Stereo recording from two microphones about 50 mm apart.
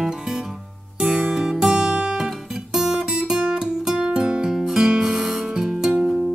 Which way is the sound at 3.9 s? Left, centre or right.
Centre.